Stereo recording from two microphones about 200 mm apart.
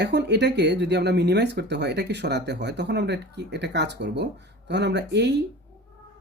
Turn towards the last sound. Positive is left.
turn(degrees=-60)  # may be behind; listen again after turning